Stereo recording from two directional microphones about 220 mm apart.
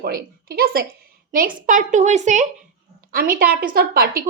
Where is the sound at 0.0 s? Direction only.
45° right (ahead or behind).